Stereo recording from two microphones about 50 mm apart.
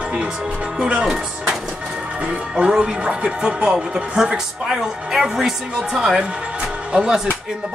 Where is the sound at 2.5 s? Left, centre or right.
Centre.